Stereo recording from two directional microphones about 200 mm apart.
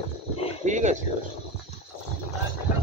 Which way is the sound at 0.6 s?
35° right (ahead or behind).